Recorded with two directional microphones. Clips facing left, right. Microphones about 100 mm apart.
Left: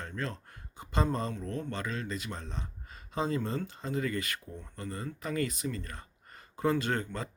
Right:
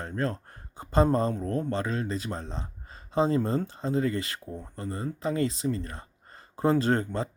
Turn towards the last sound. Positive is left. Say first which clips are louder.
# right 7 dB
turn(degrees=-30)  # may be behind; listen again after turning